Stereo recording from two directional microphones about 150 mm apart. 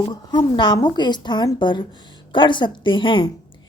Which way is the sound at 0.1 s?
30° left (ahead or behind).